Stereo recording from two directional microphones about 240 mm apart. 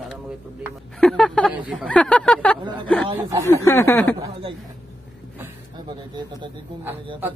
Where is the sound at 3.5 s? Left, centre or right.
Centre.